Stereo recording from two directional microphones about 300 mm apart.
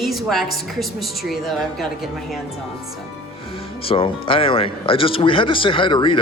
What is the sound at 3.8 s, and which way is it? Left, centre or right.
Speech, centre.